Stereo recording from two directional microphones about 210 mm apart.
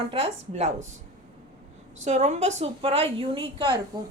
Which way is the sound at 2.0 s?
35° right (ahead or behind).